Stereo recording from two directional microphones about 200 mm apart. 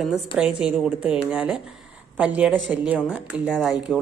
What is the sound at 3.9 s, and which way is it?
Speech, 5° left (ahead or behind).